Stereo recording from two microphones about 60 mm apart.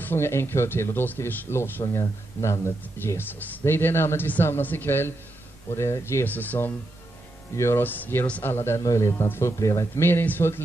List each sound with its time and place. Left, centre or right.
0.0 s speech: left
5.7 s speech: left
6.2 s speech: left
7.5 s speech: left
7.8 s speech: left
8.5 s speech: left
8.8 s speech: left
10.0 s speech: left